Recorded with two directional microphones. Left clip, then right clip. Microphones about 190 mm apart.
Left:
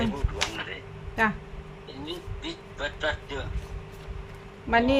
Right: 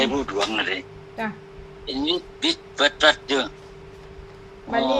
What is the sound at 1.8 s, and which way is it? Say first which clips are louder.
A man's voice: right 13 dB; 65° right (ahead or behind).